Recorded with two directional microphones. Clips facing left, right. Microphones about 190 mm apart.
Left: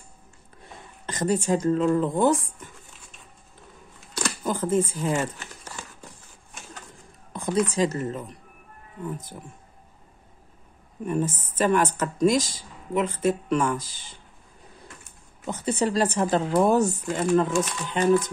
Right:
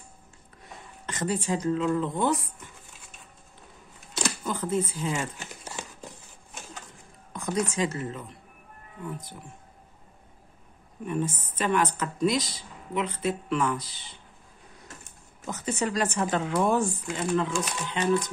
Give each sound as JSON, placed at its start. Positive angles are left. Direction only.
{"t": 1.0, "sound": "a woman's voice", "side_deg": 40}
{"t": 4.5, "sound": "a woman's voice", "side_deg": 45}
{"t": 7.3, "sound": "speech", "side_deg": 30}
{"t": 11.1, "sound": "a woman's voice", "side_deg": 45}
{"t": 15.4, "sound": "speech", "side_deg": 30}